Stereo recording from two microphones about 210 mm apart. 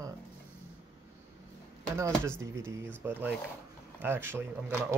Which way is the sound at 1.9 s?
15° right (ahead or behind).